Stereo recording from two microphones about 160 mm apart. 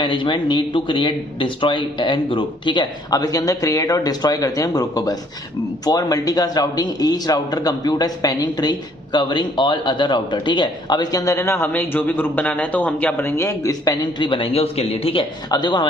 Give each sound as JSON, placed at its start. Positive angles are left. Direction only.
{"t": 0.0, "sound": "a man's voice", "side_deg": 30}